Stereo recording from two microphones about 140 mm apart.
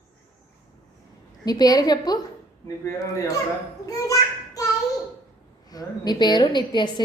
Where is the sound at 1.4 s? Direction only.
30° left (ahead or behind).